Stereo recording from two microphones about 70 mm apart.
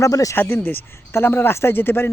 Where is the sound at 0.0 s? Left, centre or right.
Left.